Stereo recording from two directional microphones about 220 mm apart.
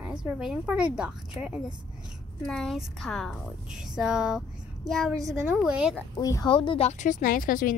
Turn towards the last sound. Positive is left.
turn(degrees=40)  # may be behind; listen again after turning